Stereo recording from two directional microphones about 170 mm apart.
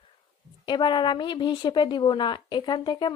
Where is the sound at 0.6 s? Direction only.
25° left (ahead or behind).